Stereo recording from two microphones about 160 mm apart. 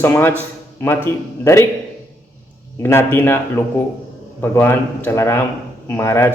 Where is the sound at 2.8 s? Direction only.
15° left (ahead or behind).